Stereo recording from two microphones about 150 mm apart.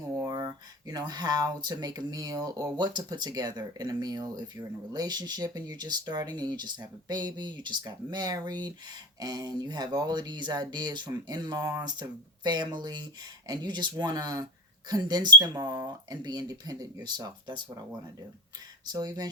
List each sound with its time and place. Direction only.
0.2 s speech: 25° right (ahead or behind)
18.9 s speech: 25° right (ahead or behind)